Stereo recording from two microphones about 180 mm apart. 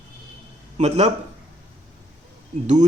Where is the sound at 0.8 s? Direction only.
35° right (ahead or behind).